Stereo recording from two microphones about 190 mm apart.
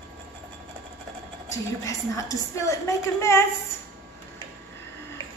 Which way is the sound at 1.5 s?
15° left (ahead or behind).